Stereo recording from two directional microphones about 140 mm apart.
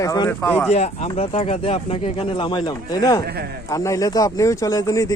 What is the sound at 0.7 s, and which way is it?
Speech, 50° left (ahead or behind).